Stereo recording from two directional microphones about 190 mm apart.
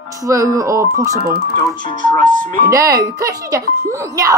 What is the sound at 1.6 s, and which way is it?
Speech, 25° left (ahead or behind).